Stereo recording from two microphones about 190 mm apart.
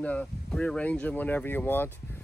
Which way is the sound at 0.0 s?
5° left (ahead or behind).